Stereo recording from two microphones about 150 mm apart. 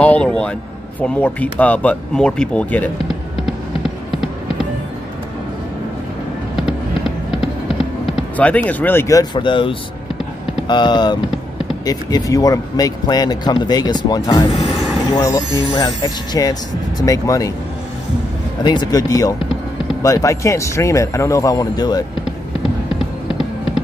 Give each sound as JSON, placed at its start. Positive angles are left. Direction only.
{"t": 0.0, "sound": "a sound", "side_deg": 10}
{"t": 1.0, "sound": "speech", "side_deg": 10}
{"t": 3.4, "sound": "run", "side_deg": -5}
{"t": 8.4, "sound": "a man's voice", "side_deg": 10}
{"t": 15.1, "sound": "a man's voice", "side_deg": 20}
{"t": 18.6, "sound": "a man's voice", "side_deg": 30}